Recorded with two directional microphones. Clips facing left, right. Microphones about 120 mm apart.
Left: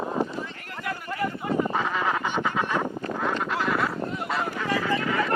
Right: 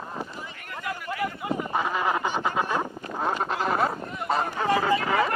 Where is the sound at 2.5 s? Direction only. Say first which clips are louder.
Even; 30° right (ahead or behind).